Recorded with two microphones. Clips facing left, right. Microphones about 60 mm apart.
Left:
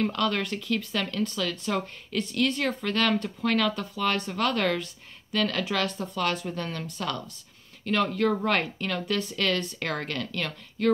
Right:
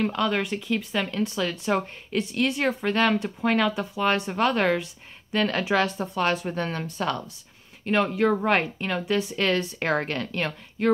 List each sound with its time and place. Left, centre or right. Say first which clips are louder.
0.0 s speech: right 2 dB; centre